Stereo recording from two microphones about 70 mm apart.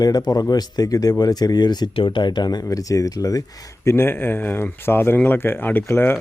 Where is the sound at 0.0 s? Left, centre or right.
Left.